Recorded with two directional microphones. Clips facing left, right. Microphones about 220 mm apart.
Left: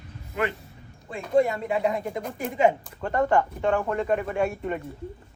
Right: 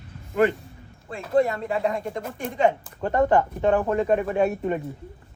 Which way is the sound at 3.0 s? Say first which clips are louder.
Right 3 dB; 20° right (ahead or behind).